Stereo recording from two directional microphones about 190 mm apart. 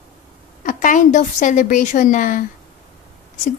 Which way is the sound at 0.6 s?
45° left (ahead or behind).